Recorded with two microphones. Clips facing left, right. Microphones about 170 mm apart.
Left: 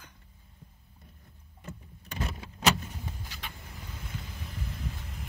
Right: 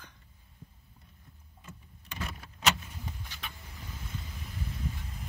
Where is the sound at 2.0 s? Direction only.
35° left (ahead or behind).